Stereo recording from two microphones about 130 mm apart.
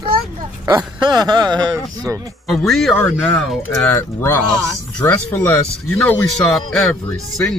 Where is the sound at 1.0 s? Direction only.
35° right (ahead or behind).